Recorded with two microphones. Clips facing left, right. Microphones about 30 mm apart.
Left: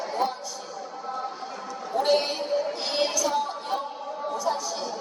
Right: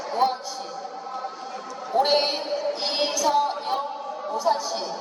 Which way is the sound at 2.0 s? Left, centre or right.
Right.